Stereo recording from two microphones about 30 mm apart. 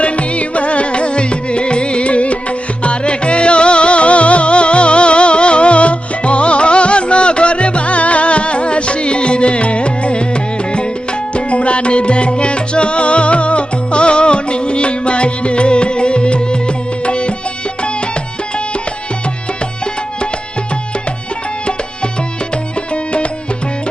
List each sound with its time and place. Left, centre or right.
0.0 s music: left